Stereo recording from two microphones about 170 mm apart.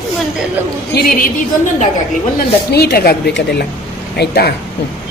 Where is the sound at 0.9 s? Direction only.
60° left (ahead or behind).